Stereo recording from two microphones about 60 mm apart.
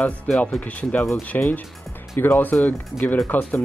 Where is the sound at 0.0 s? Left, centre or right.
Left.